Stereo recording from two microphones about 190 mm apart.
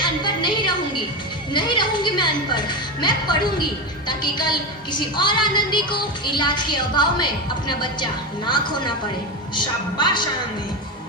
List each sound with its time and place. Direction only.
0.0 s music: 25° left (ahead or behind)
1.5 s speech: 25° left (ahead or behind)
4.9 s speech: 25° left (ahead or behind)
8.4 s speech: 25° left (ahead or behind)